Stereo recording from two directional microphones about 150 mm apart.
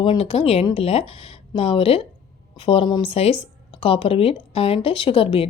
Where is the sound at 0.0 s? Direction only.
35° left (ahead or behind).